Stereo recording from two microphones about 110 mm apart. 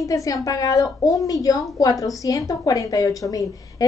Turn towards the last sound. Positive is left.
turn(degrees=35)  # may be behind; listen again after turning